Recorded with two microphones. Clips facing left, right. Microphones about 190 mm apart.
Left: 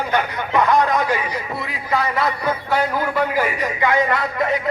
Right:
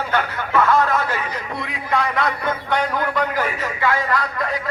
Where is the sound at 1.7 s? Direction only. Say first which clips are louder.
Even; centre (ahead or behind).